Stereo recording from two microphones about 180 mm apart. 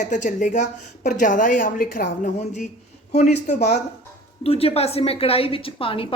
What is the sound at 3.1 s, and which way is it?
A woman's voice, 40° left (ahead or behind).